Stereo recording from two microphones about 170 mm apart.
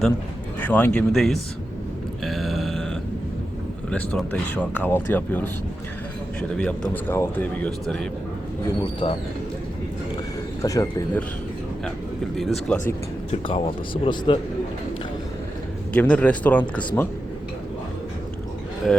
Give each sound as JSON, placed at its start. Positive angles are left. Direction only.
{"t": 0.7, "sound": "speech", "side_deg": 10}
{"t": 2.2, "sound": "a sound", "side_deg": 0}
{"t": 3.8, "sound": "speech", "side_deg": 5}
{"t": 6.6, "sound": "speech", "side_deg": 5}
{"t": 8.8, "sound": "speech", "side_deg": 30}
{"t": 10.6, "sound": "speech", "side_deg": 20}
{"t": 12.4, "sound": "speech", "side_deg": 5}
{"t": 13.3, "sound": "speech", "side_deg": 30}
{"t": 15.9, "sound": "speech", "side_deg": 10}